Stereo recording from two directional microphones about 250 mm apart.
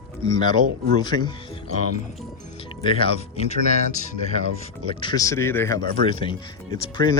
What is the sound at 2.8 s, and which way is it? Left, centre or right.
Speech, left.